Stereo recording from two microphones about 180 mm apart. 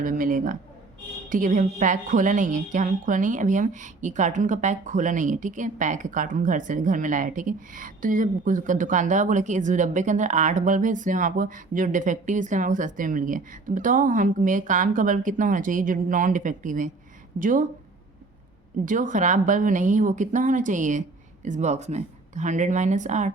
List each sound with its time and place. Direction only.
0.0 s a woman's voice: 50° right (ahead or behind)
18.9 s a woman's voice: 45° right (ahead or behind)